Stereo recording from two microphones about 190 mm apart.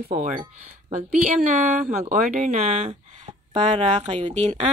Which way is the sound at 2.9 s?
35° right (ahead or behind).